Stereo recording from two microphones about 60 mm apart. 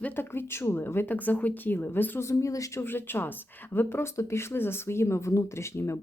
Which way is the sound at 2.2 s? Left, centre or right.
Left.